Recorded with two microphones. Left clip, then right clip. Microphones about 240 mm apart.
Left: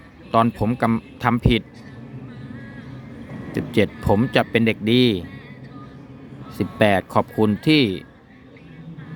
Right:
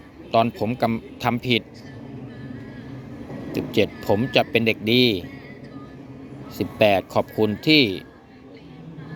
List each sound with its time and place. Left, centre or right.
0.3 s speech: left
3.5 s speech: left
6.6 s speech: left